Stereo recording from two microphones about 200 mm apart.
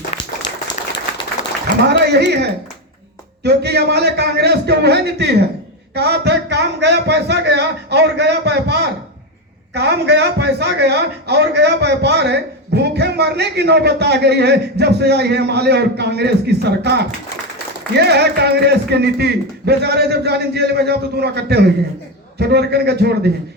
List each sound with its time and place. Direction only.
1.9 s a man's voice: 55° right (ahead or behind)